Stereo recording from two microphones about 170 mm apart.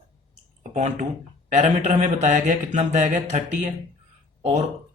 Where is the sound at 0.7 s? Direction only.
45° right (ahead or behind).